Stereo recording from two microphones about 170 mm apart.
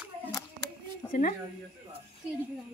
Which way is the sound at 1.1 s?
50° left (ahead or behind).